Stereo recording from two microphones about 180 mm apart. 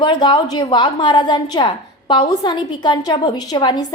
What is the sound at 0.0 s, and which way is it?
A woman's voice, 25° left (ahead or behind).